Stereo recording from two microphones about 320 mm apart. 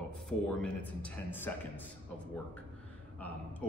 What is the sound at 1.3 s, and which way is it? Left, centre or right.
Speech, centre.